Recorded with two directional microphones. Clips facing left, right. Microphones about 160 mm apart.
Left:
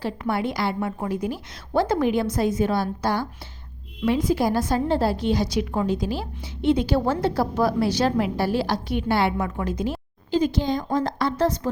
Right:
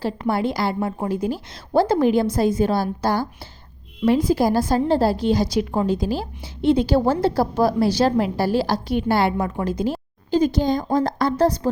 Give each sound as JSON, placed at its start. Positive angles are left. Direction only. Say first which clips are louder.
{"t": 0.0, "sound": "a woman's voice", "louder": "right 3 dB", "side_deg": -35}